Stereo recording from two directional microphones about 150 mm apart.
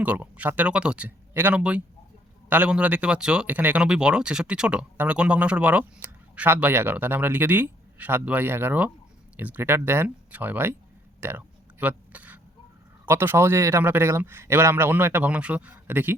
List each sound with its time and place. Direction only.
0.0 s speech: 10° right (ahead or behind)
11.2 s a sound: 15° right (ahead or behind)
13.1 s speech: 15° right (ahead or behind)